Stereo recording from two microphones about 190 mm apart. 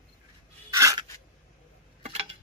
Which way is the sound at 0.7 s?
15° right (ahead or behind).